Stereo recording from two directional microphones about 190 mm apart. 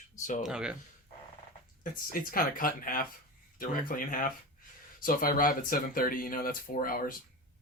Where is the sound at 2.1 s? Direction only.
45° left (ahead or behind).